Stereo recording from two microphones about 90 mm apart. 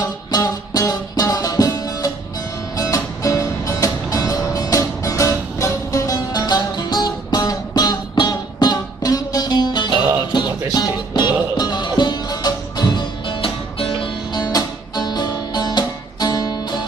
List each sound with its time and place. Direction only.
0.0 s music: 50° left (ahead or behind); by 14.1 s 80° left
14.3 s music: 50° left (ahead or behind)